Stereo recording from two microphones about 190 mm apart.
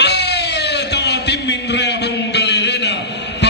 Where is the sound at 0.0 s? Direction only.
60° left (ahead or behind).